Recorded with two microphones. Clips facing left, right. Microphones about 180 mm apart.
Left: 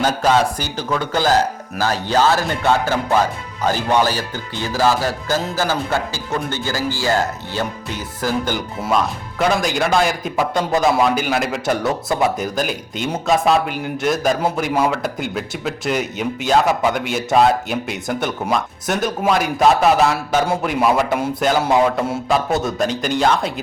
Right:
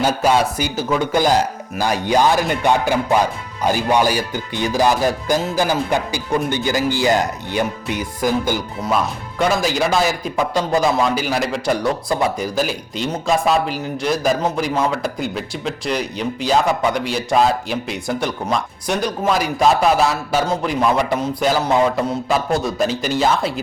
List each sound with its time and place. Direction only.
0.0 s speech: 10° right (ahead or behind)
8.8 s speech: centre (ahead or behind)